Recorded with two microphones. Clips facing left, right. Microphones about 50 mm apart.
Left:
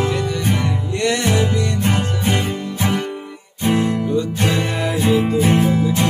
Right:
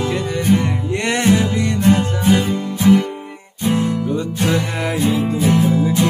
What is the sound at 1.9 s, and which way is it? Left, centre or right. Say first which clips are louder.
Music: right 4 dB; left.